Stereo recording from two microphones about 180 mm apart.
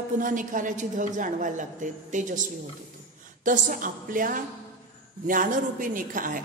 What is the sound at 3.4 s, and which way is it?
A woman's voice, 45° right (ahead or behind).